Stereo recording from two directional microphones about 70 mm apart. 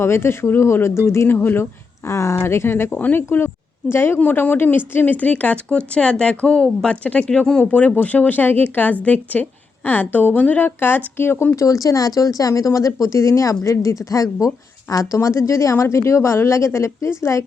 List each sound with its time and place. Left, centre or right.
0.0 s speech: left
2.0 s speech: left
3.2 s speech: left
4.2 s speech: left
7.6 s speech: left